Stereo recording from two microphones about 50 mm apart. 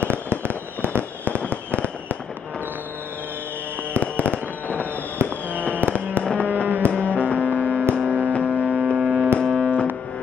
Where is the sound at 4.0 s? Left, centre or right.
Left.